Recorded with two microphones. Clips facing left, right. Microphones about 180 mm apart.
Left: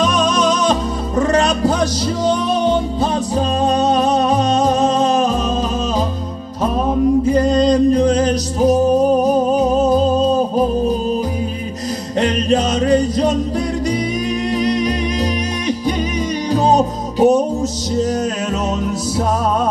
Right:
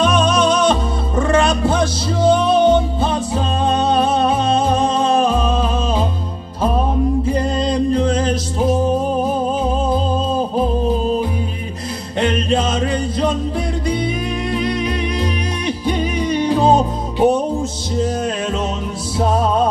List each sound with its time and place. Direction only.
0.0 s music: 35° left (ahead or behind)
3.0 s music: 40° left (ahead or behind)
7.7 s music: 40° left (ahead or behind)
12.2 s music: 40° left (ahead or behind)
14.5 s music: 40° left (ahead or behind)